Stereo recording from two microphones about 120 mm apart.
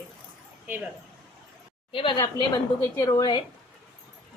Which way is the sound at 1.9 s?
45° left (ahead or behind).